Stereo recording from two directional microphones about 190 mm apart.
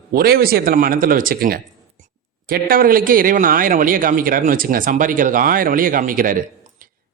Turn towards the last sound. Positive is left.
turn(degrees=-45)  # may be behind; listen again after turning